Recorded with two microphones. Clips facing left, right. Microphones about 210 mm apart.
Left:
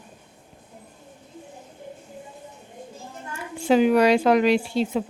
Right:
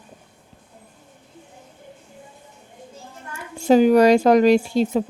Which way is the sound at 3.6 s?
40° right (ahead or behind).